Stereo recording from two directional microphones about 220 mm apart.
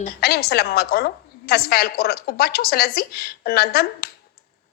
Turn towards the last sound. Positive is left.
turn(degrees=45)  # may be behind; listen again after turning